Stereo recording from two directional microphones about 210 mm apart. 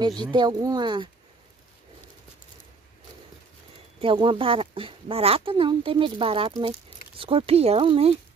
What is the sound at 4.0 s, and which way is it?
Speech, 25° right (ahead or behind).